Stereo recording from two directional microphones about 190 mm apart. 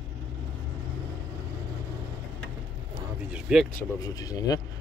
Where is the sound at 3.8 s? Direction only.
20° left (ahead or behind).